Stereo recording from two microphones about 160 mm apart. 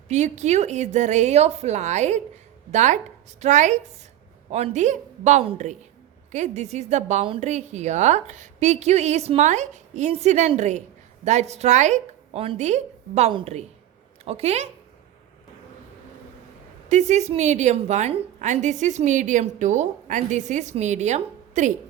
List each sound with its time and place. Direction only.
0.1 s a woman's voice: 45° right (ahead or behind)
16.9 s a woman's voice: 45° right (ahead or behind)